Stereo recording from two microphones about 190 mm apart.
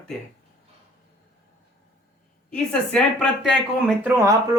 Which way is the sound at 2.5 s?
5° left (ahead or behind).